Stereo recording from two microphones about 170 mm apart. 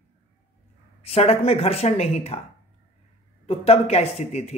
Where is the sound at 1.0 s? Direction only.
35° left (ahead or behind).